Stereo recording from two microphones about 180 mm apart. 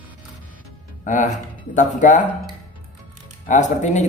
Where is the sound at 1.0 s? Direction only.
45° left (ahead or behind).